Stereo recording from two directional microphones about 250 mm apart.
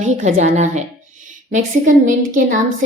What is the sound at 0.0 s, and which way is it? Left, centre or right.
A woman's voice, right.